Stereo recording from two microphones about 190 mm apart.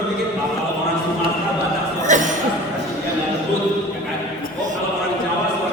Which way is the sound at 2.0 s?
40° right (ahead or behind).